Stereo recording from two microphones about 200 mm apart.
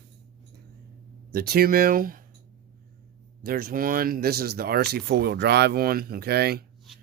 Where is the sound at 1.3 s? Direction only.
50° right (ahead or behind).